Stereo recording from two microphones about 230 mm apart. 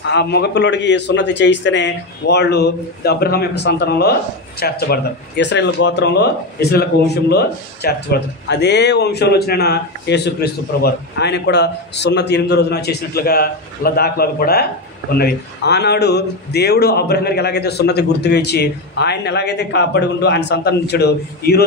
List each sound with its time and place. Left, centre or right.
0.1 s a man's voice: left